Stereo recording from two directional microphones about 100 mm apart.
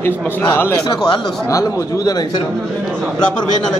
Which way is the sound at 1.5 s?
35° left (ahead or behind).